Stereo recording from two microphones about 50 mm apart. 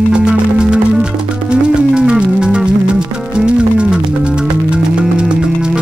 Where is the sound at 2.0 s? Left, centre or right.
Centre.